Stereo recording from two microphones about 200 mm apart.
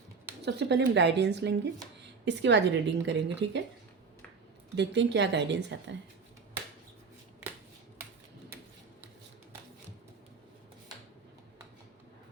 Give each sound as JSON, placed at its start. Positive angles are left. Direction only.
{"t": 0.4, "sound": "a woman's voice", "side_deg": -60}
{"t": 4.8, "sound": "a woman's voice", "side_deg": -60}